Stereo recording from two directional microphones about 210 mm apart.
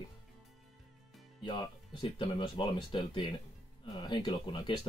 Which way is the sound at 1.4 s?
25° left (ahead or behind).